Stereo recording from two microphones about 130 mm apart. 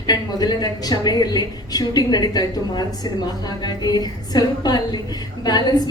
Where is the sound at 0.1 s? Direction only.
30° left (ahead or behind).